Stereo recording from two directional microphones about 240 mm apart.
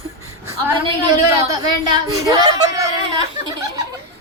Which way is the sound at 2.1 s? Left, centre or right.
Centre.